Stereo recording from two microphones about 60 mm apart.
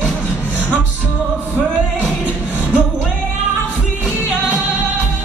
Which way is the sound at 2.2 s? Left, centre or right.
Right.